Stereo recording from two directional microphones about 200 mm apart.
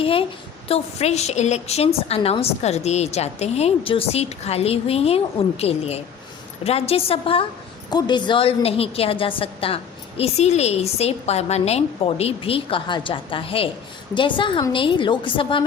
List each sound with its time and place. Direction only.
0.0 s a woman's voice: 25° left (ahead or behind)